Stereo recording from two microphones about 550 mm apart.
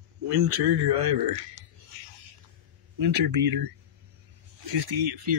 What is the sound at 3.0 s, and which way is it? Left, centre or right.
Speech, right.